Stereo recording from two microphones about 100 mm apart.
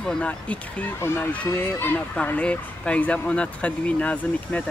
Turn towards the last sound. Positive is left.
turn(degrees=15)  # may be behind; listen again after turning